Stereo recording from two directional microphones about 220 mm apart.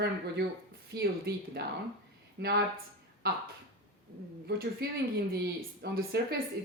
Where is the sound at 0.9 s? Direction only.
45° right (ahead or behind).